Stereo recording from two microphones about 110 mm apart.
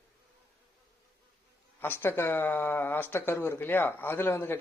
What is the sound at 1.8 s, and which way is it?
Speech, 20° left (ahead or behind).